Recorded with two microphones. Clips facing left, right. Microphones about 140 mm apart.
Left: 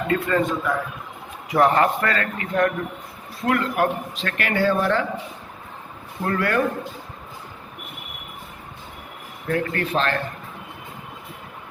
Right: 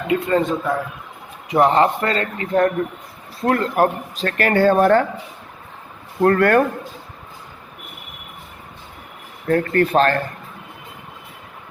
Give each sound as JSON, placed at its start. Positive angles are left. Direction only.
{"t": 0.1, "sound": "speech", "side_deg": -25}
{"t": 6.2, "sound": "speech", "side_deg": -55}
{"t": 9.5, "sound": "speech", "side_deg": -45}